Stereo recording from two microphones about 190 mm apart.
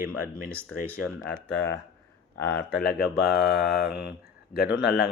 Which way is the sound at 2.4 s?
60° left (ahead or behind).